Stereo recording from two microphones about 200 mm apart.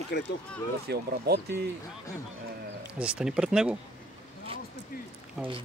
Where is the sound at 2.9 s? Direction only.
5° right (ahead or behind).